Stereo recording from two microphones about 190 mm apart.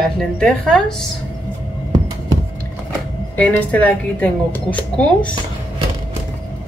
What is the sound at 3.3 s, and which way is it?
A woman's voice, 5° left (ahead or behind).